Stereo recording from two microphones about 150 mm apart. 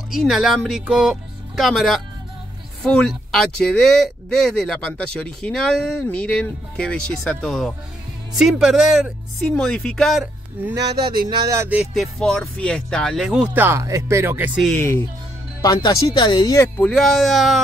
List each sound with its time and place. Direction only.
0.1 s speech: centre (ahead or behind)
10.7 s speech: 30° right (ahead or behind)
11.5 s speech: 15° right (ahead or behind)
11.8 s speech: centre (ahead or behind)
15.6 s speech: 25° left (ahead or behind)
16.8 s speech: centre (ahead or behind)